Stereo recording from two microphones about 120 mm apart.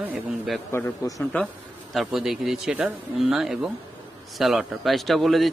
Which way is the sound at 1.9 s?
Centre (ahead or behind).